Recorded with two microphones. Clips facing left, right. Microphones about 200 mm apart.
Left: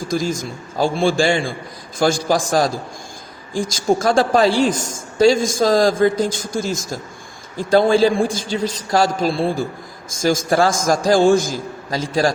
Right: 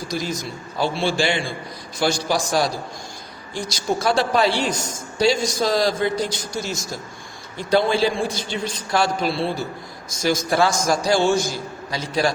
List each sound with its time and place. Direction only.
0.0 s a woman's voice: 50° left (ahead or behind)